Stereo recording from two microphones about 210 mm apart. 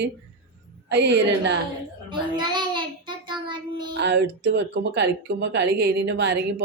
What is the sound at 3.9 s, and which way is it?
Speech, 55° right (ahead or behind).